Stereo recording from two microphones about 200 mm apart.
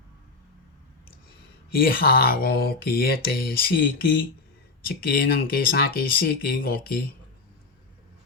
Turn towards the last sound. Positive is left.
turn(degrees=50)  # may be behind; listen again after turning